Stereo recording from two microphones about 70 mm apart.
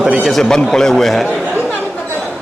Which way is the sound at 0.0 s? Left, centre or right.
Centre.